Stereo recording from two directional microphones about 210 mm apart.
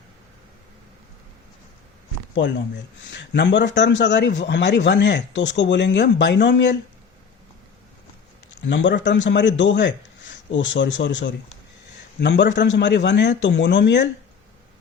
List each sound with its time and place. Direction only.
2.3 s speech: 55° left (ahead or behind)
8.6 s speech: 60° left (ahead or behind)